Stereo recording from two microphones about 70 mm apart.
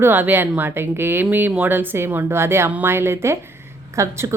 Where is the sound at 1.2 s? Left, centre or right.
Right.